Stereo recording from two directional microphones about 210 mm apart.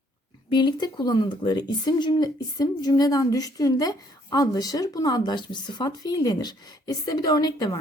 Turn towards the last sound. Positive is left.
turn(degrees=20)  # may be behind; listen again after turning